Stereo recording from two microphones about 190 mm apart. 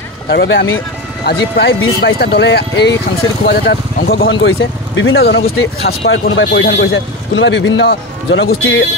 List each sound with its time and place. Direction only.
0.3 s speech: 70° left (ahead or behind)
1.2 s speech: 60° left (ahead or behind)
6.1 s speech: 85° left
6.6 s speech: 70° left (ahead or behind)